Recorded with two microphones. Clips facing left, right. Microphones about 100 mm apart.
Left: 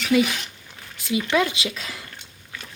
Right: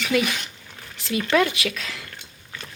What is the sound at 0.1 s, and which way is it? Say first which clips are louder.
Speech: left 4 dB; 15° left (ahead or behind).